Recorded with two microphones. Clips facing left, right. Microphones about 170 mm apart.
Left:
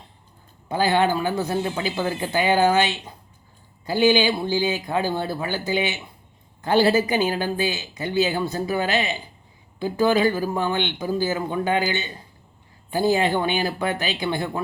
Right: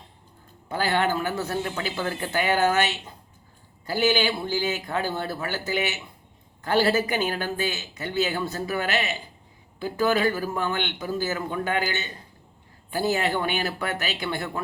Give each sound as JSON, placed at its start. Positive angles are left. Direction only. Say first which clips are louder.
{"t": 0.7, "sound": "speech", "louder": "left 4 dB", "side_deg": 15}
{"t": 3.8, "sound": "speech", "louder": "left 5 dB", "side_deg": 20}